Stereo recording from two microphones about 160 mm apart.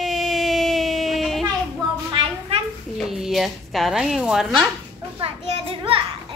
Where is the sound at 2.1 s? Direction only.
35° right (ahead or behind).